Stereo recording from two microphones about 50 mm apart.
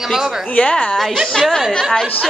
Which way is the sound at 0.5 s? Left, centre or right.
Left.